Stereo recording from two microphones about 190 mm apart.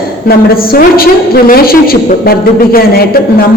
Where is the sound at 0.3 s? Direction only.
50° left (ahead or behind).